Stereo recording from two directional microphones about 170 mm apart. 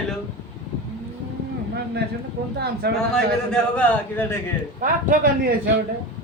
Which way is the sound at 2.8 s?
75° right (ahead or behind).